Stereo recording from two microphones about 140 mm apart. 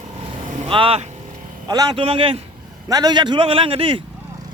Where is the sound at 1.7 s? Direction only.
30° right (ahead or behind).